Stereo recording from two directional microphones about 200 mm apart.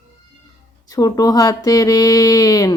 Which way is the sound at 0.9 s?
20° left (ahead or behind).